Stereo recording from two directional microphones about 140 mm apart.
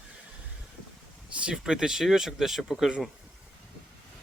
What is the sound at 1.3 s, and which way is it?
Speech, 5° right (ahead or behind).